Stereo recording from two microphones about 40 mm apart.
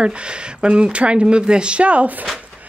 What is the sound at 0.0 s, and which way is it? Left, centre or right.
Speech, right.